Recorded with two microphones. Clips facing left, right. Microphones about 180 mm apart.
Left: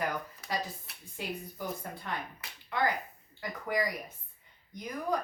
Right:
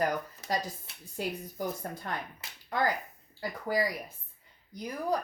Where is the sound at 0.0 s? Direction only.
40° right (ahead or behind).